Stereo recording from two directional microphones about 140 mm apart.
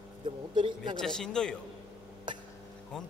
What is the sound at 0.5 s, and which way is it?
Speech, 35° right (ahead or behind).